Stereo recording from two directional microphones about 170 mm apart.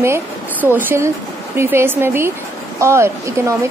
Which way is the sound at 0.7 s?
10° right (ahead or behind).